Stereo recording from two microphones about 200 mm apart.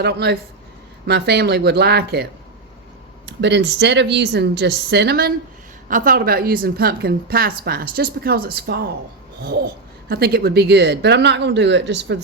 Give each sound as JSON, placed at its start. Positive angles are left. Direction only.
{"t": 0.0, "sound": "speech", "side_deg": -55}
{"t": 3.2, "sound": "a woman's voice", "side_deg": -60}